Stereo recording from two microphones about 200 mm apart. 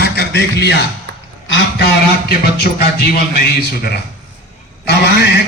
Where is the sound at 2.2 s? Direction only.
50° left (ahead or behind).